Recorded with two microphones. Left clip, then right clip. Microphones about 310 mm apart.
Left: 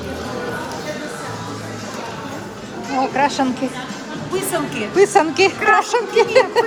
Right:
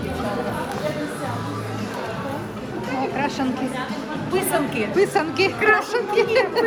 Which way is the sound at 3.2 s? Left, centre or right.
Centre.